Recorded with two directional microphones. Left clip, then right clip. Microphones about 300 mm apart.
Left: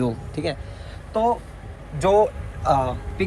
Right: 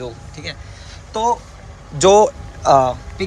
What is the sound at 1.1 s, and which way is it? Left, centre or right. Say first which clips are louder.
A man's voice: right 3 dB; centre.